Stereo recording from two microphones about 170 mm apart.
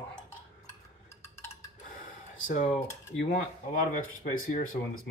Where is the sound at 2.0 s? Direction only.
50° left (ahead or behind).